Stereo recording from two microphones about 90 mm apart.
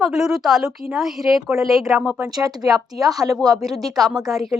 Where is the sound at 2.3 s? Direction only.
40° right (ahead or behind).